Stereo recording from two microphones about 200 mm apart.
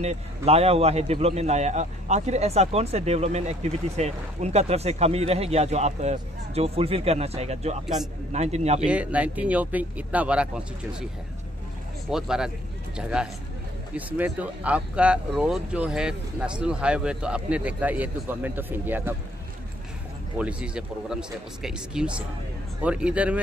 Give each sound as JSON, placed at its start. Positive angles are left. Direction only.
{"t": 0.0, "sound": "a man's voice", "side_deg": -30}
{"t": 7.8, "sound": "speech", "side_deg": 0}
{"t": 8.3, "sound": "a man's voice", "side_deg": -35}
{"t": 8.8, "sound": "speech", "side_deg": -5}
{"t": 12.1, "sound": "speech", "side_deg": -5}
{"t": 20.3, "sound": "speech", "side_deg": -5}